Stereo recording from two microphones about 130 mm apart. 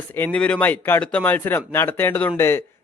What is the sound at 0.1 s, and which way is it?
Speech, 15° left (ahead or behind).